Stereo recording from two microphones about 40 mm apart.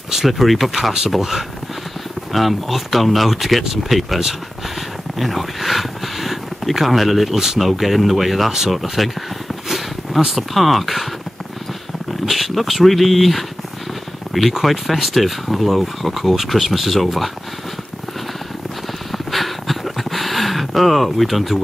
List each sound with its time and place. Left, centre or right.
0.1 s speech: centre
12.1 s speech: centre
19.1 s a sound: centre